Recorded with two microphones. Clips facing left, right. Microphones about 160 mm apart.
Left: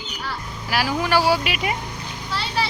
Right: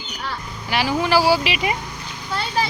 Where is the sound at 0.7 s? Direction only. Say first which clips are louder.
Right 2 dB; centre (ahead or behind).